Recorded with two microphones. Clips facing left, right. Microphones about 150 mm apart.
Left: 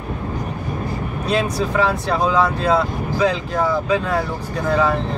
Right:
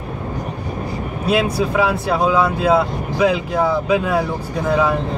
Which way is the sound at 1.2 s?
10° right (ahead or behind).